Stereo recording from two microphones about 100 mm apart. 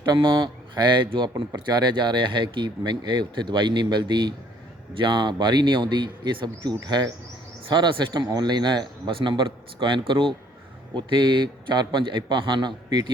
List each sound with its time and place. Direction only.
0.0 s speech: 55° right (ahead or behind)